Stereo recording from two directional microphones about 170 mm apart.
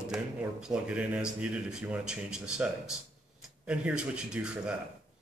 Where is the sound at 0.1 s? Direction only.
5° right (ahead or behind).